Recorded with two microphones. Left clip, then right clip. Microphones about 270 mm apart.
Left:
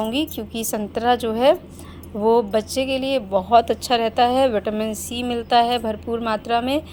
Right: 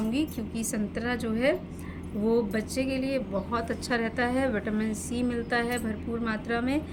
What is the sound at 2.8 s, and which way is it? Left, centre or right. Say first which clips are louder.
Speech: left 8 dB; left.